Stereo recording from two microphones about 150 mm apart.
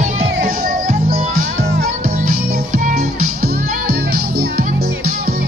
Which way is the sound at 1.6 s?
90° right.